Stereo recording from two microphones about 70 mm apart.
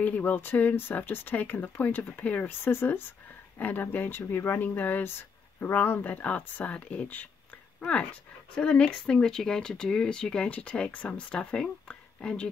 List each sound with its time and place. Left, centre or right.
0.0 s speech: left